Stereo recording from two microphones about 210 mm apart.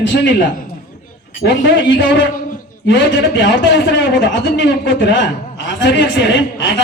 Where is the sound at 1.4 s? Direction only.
55° left (ahead or behind).